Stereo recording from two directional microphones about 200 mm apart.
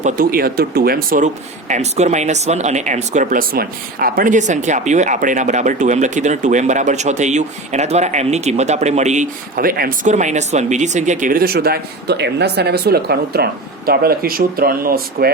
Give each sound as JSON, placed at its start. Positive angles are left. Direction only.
{"t": 0.0, "sound": "speech", "side_deg": -45}